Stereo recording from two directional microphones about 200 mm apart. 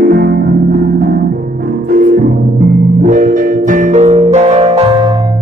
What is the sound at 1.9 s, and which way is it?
Music, 40° right (ahead or behind).